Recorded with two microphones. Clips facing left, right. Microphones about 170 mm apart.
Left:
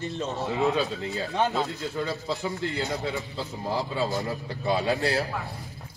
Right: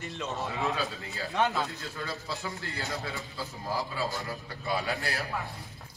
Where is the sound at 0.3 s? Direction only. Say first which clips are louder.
Left 6 dB; 20° left (ahead or behind).